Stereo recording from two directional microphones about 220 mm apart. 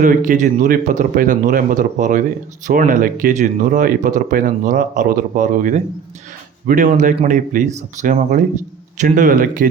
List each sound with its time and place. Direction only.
0.0 s speech: 40° right (ahead or behind)